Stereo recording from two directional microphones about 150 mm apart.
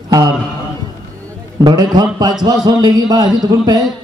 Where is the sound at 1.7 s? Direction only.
25° right (ahead or behind).